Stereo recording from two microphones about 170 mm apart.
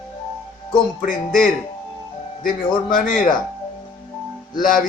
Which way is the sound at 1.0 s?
55° left (ahead or behind).